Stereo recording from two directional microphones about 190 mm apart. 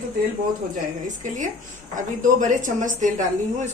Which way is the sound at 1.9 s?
40° right (ahead or behind).